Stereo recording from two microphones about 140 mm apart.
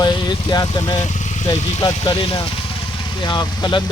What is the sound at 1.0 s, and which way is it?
Vehicle, 60° left (ahead or behind).